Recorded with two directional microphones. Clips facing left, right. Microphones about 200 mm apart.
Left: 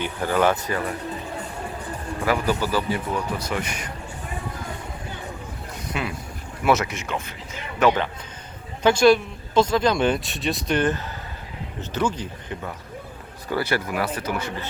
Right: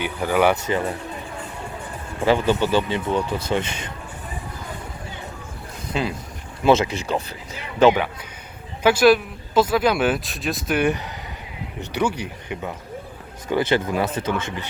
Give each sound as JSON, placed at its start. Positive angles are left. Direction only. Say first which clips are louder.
{"t": 0.0, "sound": "speech", "louder": "right 2 dB", "side_deg": -10}
{"t": 0.7, "sound": "speech", "louder": "right 3 dB", "side_deg": -25}
{"t": 2.2, "sound": "speech", "louder": "right 4 dB", "side_deg": -25}
{"t": 5.9, "sound": "speech", "louder": "right 5 dB", "side_deg": -25}
{"t": 8.8, "sound": "speech", "louder": "right 1 dB", "side_deg": -5}